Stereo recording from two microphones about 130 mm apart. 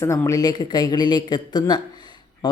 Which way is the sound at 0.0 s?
25° left (ahead or behind).